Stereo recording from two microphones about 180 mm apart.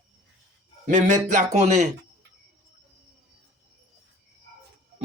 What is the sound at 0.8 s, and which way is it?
Speech, 40° right (ahead or behind).